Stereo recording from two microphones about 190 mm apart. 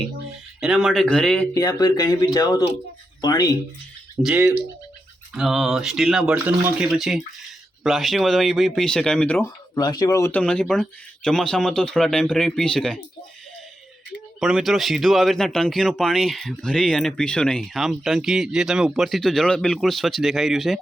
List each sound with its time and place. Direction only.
0.6 s speech: centre (ahead or behind)
1.5 s speech: 20° left (ahead or behind)
4.2 s speech: 5° right (ahead or behind)
9.7 s speech: 20° left (ahead or behind)
10.4 s speech: 5° left (ahead or behind)
14.3 s speech: centre (ahead or behind)